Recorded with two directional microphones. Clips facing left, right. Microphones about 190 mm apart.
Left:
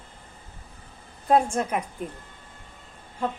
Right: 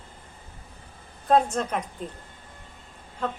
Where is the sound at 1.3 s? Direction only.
10° left (ahead or behind).